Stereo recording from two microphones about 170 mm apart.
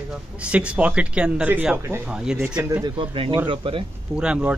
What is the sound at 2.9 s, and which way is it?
Speech, 30° right (ahead or behind).